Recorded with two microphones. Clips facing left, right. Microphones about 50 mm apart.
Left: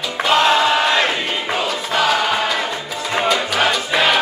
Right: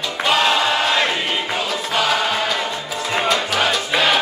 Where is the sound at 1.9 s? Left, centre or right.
Centre.